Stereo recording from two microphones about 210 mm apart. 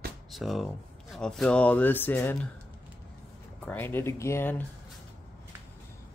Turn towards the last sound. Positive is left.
turn(degrees=10)  # may be behind; listen again after turning